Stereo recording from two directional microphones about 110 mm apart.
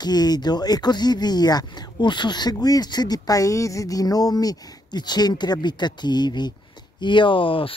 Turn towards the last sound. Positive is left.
turn(degrees=55)  # may be behind; listen again after turning